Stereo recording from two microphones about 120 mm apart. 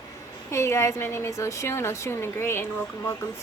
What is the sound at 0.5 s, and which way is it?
Speech, 25° left (ahead or behind).